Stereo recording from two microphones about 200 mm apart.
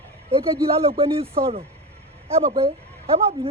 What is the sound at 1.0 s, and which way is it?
Speech, 30° right (ahead or behind).